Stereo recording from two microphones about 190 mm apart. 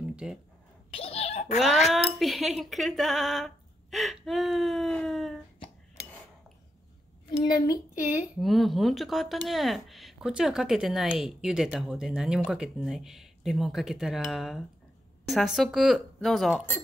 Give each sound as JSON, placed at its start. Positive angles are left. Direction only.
{"t": 0.0, "sound": "a sound", "side_deg": -5}
{"t": 0.9, "sound": "giggle", "side_deg": 30}
{"t": 1.9, "sound": "speech", "side_deg": 0}
{"t": 7.2, "sound": "a woman's voice", "side_deg": 20}
{"t": 8.4, "sound": "speech", "side_deg": 0}